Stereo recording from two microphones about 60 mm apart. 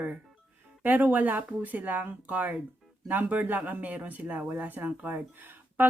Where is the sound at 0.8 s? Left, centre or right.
Right.